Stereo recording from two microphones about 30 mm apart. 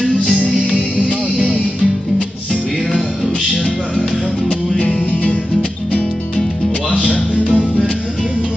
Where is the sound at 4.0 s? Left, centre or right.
Left.